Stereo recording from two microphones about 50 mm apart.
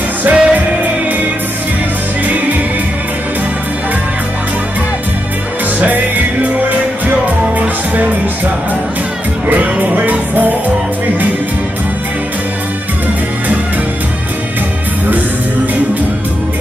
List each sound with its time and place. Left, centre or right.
0.2 s music: right
5.8 s music: right
9.5 s music: right